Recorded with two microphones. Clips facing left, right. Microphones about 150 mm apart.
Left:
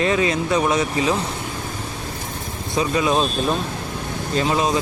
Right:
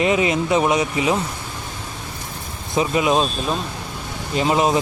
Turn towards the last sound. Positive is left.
turn(degrees=-20)  # may be behind; listen again after turning